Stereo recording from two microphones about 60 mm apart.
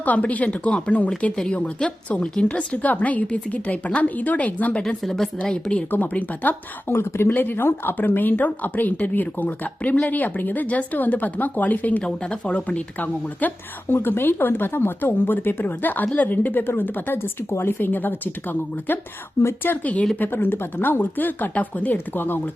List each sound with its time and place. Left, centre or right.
0.0 s a woman's voice: left
5.0 s a woman's voice: centre
5.4 s a woman's voice: centre
5.9 s speech: left
6.9 s speech: left
13.9 s speech: left
19.4 s speech: left
19.8 s speech: left
20.1 s speech: left